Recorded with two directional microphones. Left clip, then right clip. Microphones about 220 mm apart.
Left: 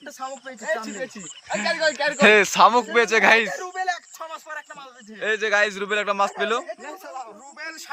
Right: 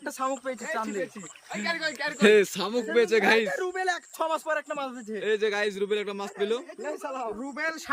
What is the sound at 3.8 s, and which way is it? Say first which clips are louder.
Speech: left 5 dB; 30° right (ahead or behind).